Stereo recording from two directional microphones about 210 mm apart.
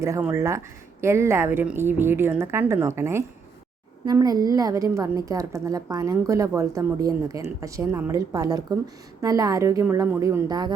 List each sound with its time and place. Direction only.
0.0 s a woman's voice: 10° right (ahead or behind)